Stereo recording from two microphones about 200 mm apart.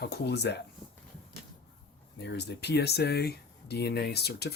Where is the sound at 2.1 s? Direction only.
55° left (ahead or behind).